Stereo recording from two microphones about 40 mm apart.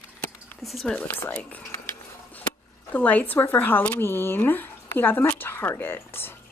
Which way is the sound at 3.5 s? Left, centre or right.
Left.